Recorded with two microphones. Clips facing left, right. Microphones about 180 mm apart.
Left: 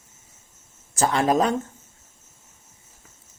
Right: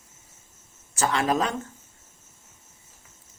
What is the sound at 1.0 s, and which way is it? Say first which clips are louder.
Speech: left 4 dB; 40° left (ahead or behind).